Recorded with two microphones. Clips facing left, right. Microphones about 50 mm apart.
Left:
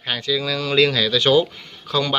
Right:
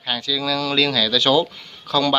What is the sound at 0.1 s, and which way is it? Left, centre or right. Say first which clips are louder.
Speech: even; left.